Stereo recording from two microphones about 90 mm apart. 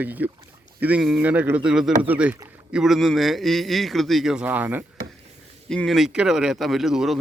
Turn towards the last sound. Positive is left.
turn(degrees=-5)  # may be behind; listen again after turning